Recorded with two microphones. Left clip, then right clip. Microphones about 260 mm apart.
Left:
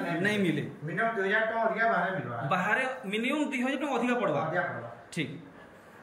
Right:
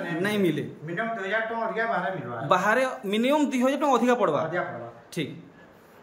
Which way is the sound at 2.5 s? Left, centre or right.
Centre.